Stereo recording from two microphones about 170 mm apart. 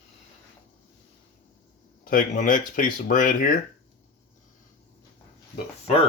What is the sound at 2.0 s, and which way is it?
Speech, 50° left (ahead or behind).